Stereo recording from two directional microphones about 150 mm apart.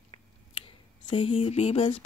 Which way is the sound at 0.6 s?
35° left (ahead or behind).